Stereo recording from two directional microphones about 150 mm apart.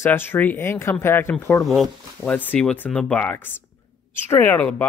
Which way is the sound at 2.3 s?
10° left (ahead or behind).